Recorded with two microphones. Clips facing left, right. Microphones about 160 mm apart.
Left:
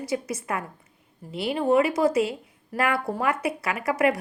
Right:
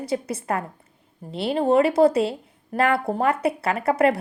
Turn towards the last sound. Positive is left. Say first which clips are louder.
# right 3 dB
turn(degrees=-30)  # may be behind; listen again after turning